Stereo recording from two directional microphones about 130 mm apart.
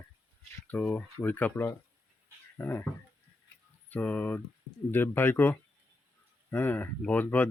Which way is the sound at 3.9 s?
10° left (ahead or behind).